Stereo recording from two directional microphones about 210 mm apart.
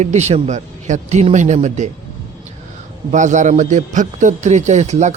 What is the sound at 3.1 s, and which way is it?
A man's voice, 35° right (ahead or behind).